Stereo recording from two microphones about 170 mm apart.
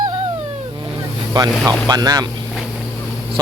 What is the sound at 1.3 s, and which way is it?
Speech, 25° right (ahead or behind).